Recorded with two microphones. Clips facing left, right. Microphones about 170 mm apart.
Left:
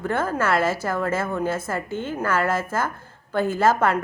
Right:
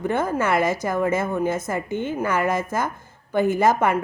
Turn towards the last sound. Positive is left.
turn(degrees=-15)  # may be behind; listen again after turning